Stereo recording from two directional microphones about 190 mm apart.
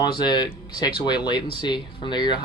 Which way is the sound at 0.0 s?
20° left (ahead or behind).